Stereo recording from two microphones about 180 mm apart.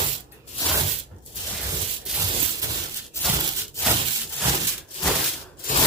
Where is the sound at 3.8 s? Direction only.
15° left (ahead or behind).